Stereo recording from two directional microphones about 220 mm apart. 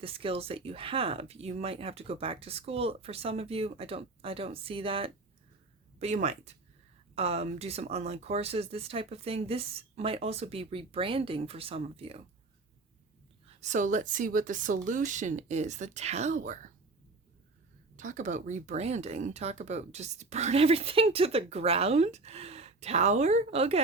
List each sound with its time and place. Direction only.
0.0 s speech: 25° right (ahead or behind)
13.6 s speech: 35° right (ahead or behind)
17.9 s speech: 35° right (ahead or behind)